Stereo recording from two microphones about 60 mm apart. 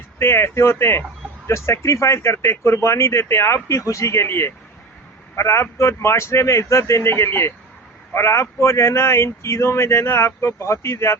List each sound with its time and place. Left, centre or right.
0.2 s speech: left